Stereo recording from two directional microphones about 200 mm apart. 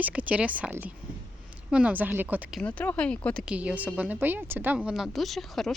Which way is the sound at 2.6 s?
5° left (ahead or behind).